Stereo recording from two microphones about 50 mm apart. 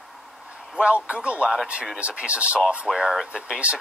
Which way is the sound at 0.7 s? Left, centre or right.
Right.